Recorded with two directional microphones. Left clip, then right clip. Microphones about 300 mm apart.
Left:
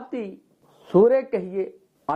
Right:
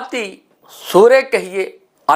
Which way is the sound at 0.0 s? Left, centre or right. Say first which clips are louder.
Right 9 dB; centre.